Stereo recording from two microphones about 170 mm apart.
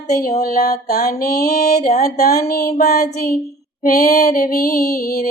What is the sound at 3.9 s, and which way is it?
Music, 50° left (ahead or behind).